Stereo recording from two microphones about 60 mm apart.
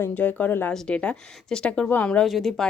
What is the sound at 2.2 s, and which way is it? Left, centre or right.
Speech, centre.